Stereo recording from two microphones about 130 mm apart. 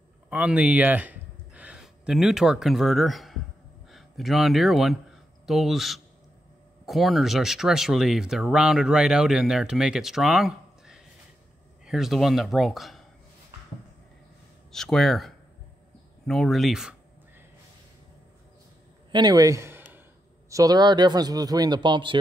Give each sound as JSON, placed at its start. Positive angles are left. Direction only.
{"t": 0.3, "sound": "speech", "side_deg": -10}
{"t": 14.7, "sound": "speech", "side_deg": 5}
{"t": 19.1, "sound": "a man's voice", "side_deg": -30}
{"t": 20.4, "sound": "speech", "side_deg": -25}